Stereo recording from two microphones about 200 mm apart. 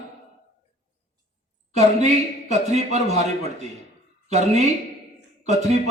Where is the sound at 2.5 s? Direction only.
35° right (ahead or behind).